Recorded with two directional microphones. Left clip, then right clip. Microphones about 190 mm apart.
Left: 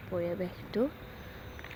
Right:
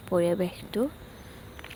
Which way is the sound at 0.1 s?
45° right (ahead or behind).